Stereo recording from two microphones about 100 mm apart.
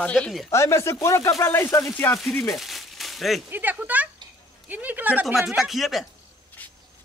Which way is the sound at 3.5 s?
20° right (ahead or behind).